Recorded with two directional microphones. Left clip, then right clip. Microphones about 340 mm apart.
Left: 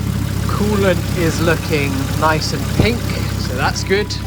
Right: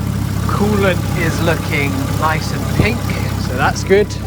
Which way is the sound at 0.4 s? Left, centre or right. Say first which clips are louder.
Right 1 dB; centre.